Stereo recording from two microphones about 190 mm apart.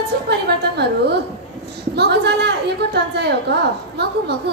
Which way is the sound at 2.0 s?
60° right (ahead or behind).